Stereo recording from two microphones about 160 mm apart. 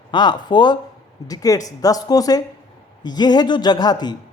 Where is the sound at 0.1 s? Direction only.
30° left (ahead or behind).